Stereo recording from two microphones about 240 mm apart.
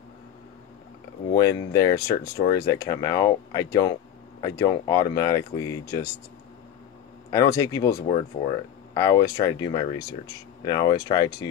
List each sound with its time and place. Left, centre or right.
1.6 s speech: centre
7.2 s speech: centre